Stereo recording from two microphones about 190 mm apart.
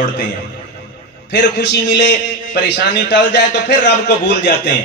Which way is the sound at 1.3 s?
65° left (ahead or behind).